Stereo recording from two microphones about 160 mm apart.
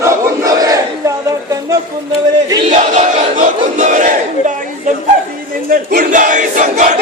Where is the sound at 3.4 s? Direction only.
50° right (ahead or behind).